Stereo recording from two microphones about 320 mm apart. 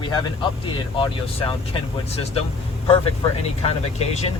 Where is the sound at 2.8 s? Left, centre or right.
Centre.